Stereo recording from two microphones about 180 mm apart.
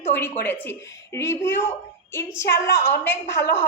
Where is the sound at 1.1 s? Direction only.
15° left (ahead or behind).